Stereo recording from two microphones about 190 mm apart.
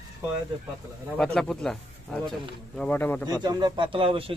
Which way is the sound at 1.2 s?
5° left (ahead or behind).